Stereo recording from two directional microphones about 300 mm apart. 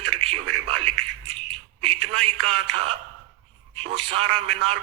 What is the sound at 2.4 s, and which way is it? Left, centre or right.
Speech, centre.